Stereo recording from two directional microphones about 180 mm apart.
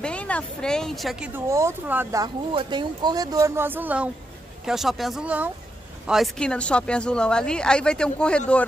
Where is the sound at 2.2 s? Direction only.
25° right (ahead or behind).